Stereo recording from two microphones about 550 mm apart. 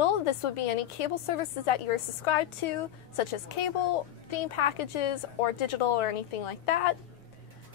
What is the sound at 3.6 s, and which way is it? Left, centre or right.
A woman's voice, left.